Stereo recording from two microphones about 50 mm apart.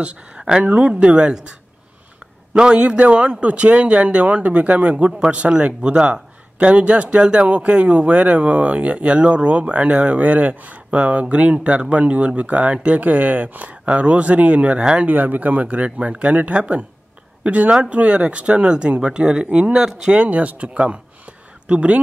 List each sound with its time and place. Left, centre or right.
0.0 s a man's voice: centre
2.5 s a man's voice: centre
15.0 s a man's voice: right
17.4 s a sound: right
17.8 s a man's voice: right